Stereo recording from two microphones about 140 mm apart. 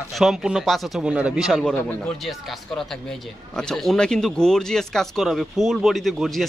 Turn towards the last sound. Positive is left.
turn(degrees=0)  # may be behind; listen again after turning